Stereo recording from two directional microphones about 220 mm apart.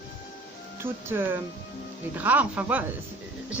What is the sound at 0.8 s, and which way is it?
A woman's voice, 10° right (ahead or behind).